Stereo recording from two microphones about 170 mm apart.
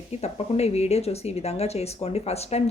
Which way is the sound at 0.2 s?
40° left (ahead or behind).